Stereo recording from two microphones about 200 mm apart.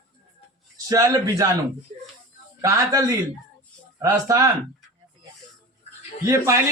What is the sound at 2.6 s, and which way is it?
Speech, 15° right (ahead or behind).